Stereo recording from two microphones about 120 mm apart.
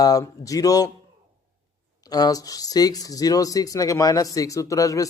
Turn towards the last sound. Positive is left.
turn(degrees=30)  # may be behind; listen again after turning